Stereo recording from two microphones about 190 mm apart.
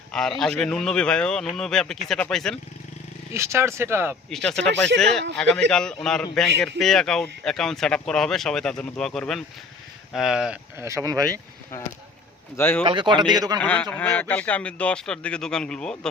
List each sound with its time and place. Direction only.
0.1 s a man's voice: centre (ahead or behind)
3.3 s speech: 15° right (ahead or behind)
4.3 s speech: 5° left (ahead or behind); by 11.2 s 15° right (ahead or behind)
11.7 s speech: 15° left (ahead or behind)
12.8 s speech: 25° right (ahead or behind)
13.6 s speech: 5° left (ahead or behind)